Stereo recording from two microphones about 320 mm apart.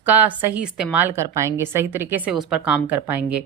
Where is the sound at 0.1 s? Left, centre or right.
Centre.